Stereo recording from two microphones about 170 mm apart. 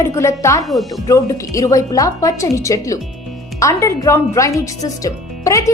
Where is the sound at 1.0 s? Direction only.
20° left (ahead or behind).